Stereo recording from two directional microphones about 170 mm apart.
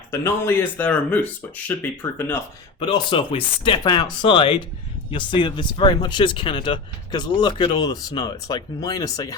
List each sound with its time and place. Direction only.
0.1 s speech: 15° left (ahead or behind)
2.8 s speech: 30° left (ahead or behind)